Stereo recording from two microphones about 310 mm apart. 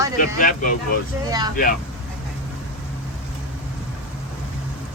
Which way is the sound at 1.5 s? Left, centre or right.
Left.